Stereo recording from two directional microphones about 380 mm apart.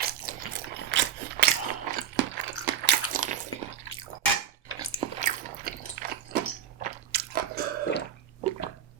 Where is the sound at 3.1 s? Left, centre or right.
Centre.